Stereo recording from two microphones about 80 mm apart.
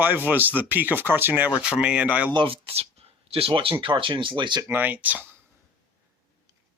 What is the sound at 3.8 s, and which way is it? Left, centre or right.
Speech, right.